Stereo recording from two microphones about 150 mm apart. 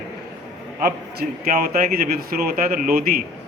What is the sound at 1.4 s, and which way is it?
Speech, 65° right (ahead or behind).